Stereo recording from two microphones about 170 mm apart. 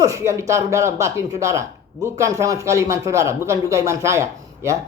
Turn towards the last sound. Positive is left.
turn(degrees=-15)  # may be behind; listen again after turning